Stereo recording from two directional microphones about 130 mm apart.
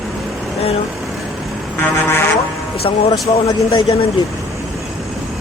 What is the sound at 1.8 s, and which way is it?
Speech, 15° left (ahead or behind).